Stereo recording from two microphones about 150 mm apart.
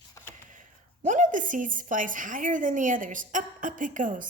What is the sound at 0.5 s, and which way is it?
A woman's voice, 60° right (ahead or behind).